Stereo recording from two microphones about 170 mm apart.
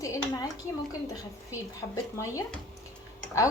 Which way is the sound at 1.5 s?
20° left (ahead or behind).